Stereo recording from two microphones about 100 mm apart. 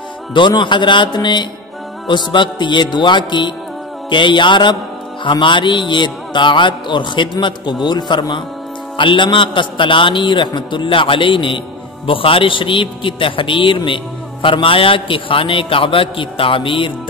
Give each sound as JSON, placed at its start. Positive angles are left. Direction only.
{"t": 0.3, "sound": "a man's voice", "side_deg": 50}